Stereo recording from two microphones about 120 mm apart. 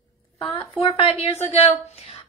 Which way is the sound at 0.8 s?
50° left (ahead or behind).